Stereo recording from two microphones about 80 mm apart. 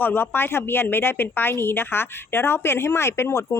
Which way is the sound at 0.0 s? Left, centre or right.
Left.